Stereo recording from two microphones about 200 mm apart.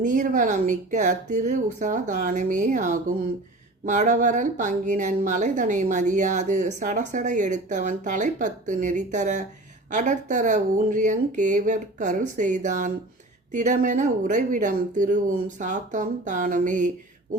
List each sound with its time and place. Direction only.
0.0 s speech: 40° right (ahead or behind)